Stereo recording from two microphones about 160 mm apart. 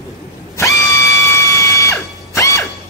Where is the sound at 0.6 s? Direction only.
20° left (ahead or behind).